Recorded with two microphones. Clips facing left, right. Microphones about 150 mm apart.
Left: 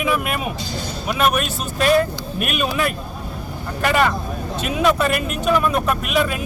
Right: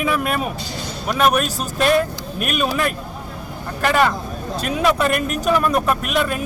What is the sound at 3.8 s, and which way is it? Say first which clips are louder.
Speech: right 1 dB; centre (ahead or behind).